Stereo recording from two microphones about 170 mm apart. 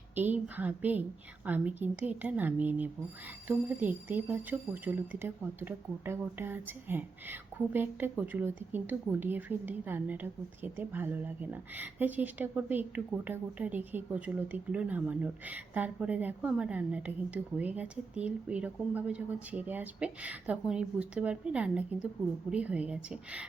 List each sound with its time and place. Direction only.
0.2 s speech: 10° right (ahead or behind)